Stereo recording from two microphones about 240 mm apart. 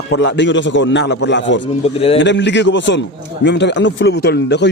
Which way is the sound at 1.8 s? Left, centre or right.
Left.